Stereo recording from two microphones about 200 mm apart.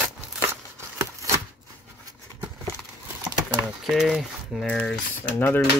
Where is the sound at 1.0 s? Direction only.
15° right (ahead or behind).